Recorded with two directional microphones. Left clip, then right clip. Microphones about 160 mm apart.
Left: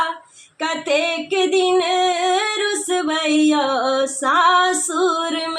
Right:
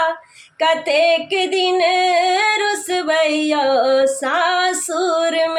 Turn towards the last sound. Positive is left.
turn(degrees=-20)  # may be behind; listen again after turning